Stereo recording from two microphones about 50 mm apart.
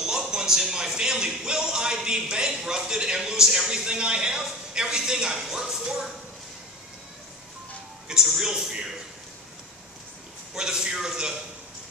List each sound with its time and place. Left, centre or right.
0.0 s speech: centre
8.1 s speech: centre
10.5 s speech: centre